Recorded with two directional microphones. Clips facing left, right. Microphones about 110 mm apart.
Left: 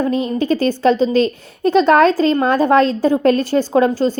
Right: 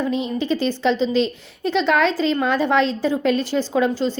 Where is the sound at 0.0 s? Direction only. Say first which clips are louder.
Left 5 dB; 45° left (ahead or behind).